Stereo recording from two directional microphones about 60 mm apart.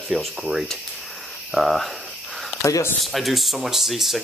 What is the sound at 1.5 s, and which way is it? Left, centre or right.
Speech, centre.